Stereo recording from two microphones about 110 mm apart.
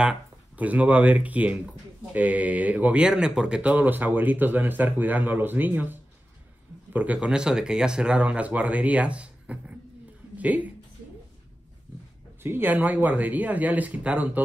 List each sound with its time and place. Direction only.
0.0 s speech: 10° right (ahead or behind)
12.4 s speech: 20° right (ahead or behind)